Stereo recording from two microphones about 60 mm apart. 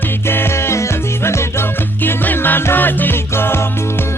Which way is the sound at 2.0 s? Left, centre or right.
Left.